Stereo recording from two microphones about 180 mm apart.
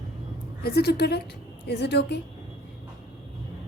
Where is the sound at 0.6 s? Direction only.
65° left (ahead or behind).